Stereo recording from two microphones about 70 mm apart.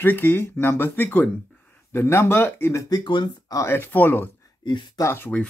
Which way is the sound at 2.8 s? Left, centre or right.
Left.